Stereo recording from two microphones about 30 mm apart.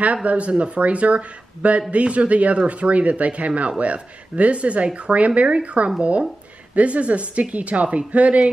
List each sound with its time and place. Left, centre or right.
0.0 s a man's voice: right